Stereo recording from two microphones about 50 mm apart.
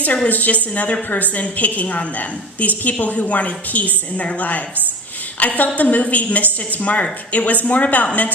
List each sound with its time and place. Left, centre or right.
0.3 s a woman's voice: left